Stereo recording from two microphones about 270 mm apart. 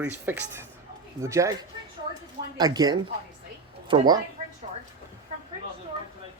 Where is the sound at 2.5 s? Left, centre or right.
Centre.